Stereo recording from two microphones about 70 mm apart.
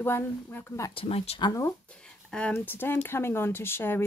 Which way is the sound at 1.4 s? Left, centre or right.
Left.